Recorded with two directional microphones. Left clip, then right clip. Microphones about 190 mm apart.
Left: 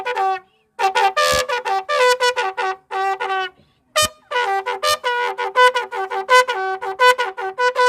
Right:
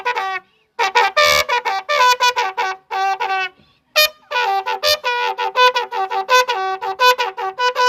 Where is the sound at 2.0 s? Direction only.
25° left (ahead or behind).